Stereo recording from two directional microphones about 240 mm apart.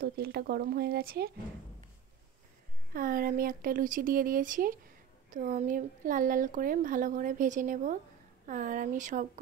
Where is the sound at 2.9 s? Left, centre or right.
Right.